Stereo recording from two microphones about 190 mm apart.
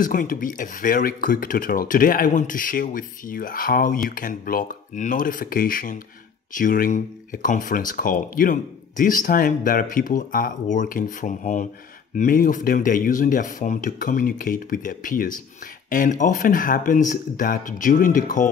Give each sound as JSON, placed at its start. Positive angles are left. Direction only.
{"t": 0.0, "sound": "speech", "side_deg": 45}